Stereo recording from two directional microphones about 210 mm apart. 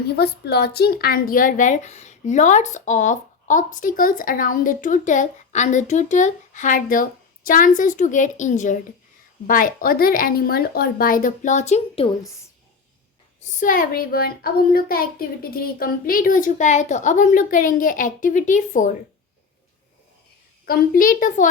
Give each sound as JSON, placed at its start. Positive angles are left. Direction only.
{"t": 0.2, "sound": "a woman's voice", "side_deg": 50}
{"t": 13.6, "sound": "speech", "side_deg": 40}
{"t": 20.7, "sound": "speech", "side_deg": 45}